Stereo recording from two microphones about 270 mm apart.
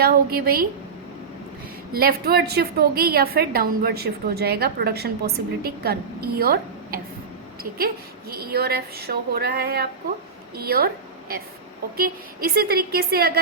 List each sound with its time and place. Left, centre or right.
0.0 s a woman's voice: right
1.9 s a woman's voice: right
8.3 s a woman's voice: right
11.9 s a woman's voice: right